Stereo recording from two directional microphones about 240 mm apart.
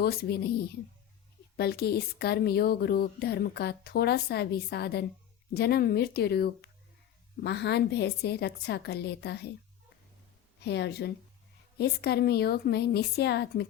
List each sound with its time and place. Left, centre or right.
0.0 s speech: left
1.5 s a woman's voice: left
10.6 s a woman's voice: left